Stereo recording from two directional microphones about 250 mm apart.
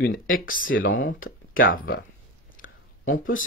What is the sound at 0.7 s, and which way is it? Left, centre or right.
Speech, left.